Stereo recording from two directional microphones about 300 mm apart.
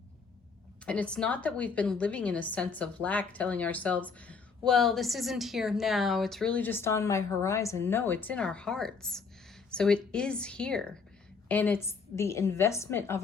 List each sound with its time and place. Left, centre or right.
0.9 s a woman's voice: centre